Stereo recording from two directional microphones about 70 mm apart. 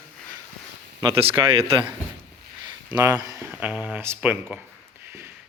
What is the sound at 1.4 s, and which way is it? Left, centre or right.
Speech, right.